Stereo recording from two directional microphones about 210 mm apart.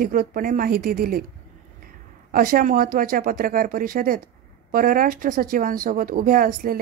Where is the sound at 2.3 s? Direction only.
45° right (ahead or behind).